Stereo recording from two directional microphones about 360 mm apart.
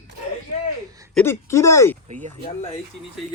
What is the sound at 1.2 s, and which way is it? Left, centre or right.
Speech, centre.